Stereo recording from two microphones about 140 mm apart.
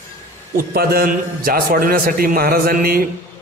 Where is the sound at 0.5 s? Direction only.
90° right.